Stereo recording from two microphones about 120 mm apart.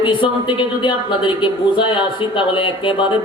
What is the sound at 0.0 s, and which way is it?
Speech, 45° left (ahead or behind).